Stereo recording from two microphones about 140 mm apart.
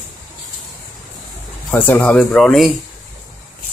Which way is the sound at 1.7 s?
15° left (ahead or behind).